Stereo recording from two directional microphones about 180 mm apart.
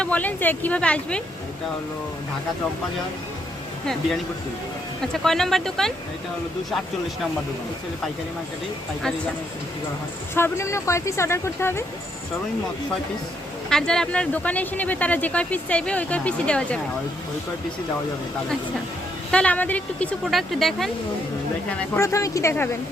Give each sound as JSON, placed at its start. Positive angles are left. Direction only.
{"t": 0.0, "sound": "speech", "side_deg": 10}
{"t": 5.1, "sound": "speech", "side_deg": 0}
{"t": 10.3, "sound": "speech", "side_deg": 15}
{"t": 13.7, "sound": "speech", "side_deg": 5}
{"t": 19.3, "sound": "speech", "side_deg": 5}
{"t": 21.7, "sound": "speech", "side_deg": 15}